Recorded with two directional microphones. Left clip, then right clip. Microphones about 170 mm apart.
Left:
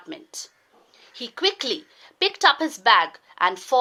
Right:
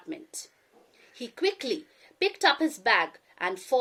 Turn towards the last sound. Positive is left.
turn(degrees=-15)  # may be behind; listen again after turning